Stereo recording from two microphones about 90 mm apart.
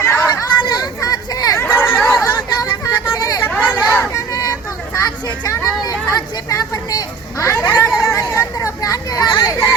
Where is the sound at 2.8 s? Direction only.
40° left (ahead or behind).